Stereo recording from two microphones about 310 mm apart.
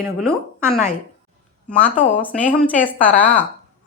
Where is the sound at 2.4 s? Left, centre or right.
Centre.